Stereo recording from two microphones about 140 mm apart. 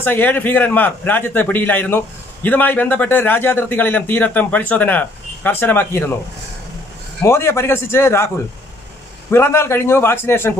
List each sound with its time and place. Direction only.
0.0 s a man's voice: 15° left (ahead or behind)
7.2 s a man's voice: 20° left (ahead or behind)
9.3 s a man's voice: 15° left (ahead or behind)